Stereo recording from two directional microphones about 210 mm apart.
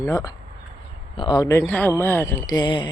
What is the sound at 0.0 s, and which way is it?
Speech, 15° left (ahead or behind).